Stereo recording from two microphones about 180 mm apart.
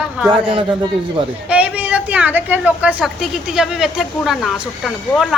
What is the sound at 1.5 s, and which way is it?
A woman's voice, 5° right (ahead or behind).